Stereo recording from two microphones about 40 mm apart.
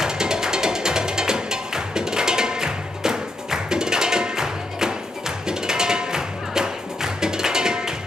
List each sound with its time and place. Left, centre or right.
0.0 s music: centre